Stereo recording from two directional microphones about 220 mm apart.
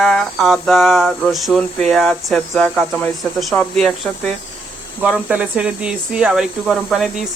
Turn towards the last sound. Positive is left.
turn(degrees=0)  # may be behind; listen again after turning